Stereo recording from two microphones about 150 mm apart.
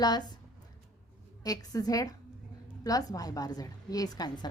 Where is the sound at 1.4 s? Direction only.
25° left (ahead or behind).